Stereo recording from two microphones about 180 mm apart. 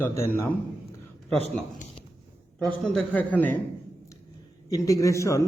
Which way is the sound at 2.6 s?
5° left (ahead or behind).